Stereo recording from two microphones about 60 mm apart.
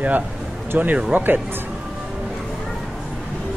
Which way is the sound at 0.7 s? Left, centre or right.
Right.